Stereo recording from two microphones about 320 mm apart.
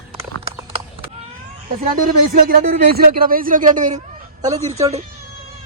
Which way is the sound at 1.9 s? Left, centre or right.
Right.